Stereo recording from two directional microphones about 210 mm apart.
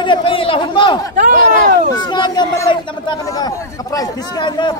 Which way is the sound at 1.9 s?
20° left (ahead or behind).